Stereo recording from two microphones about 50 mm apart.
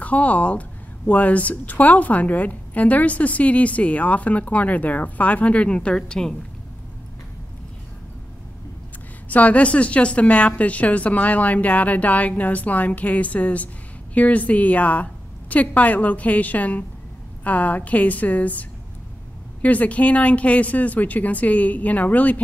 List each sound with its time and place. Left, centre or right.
0.0 s speech: left; by 6.3 s centre
9.3 s a woman's voice: left